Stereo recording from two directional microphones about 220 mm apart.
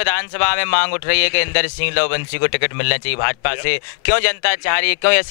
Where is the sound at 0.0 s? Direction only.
15° left (ahead or behind).